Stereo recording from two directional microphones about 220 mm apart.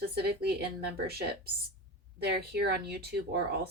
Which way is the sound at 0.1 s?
45° right (ahead or behind).